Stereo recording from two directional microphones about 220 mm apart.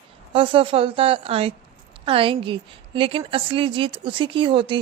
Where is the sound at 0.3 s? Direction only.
25° right (ahead or behind).